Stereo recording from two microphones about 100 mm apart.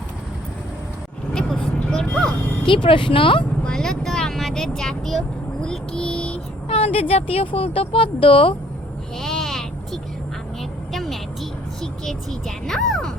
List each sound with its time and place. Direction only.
1.3 s vehicle: 5° left (ahead or behind)
2.6 s speech: 55° left (ahead or behind)
3.6 s speech: 5° left (ahead or behind)
5.6 s vehicle: 10° left (ahead or behind)
6.7 s speech: 75° left (ahead or behind)
9.2 s vehicle: 5° left (ahead or behind)
11.8 s a sound: 5° left (ahead or behind)